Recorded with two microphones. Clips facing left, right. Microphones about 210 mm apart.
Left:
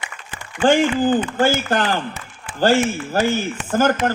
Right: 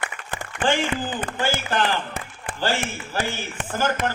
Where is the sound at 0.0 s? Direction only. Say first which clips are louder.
Right 4 dB; 55° right (ahead or behind).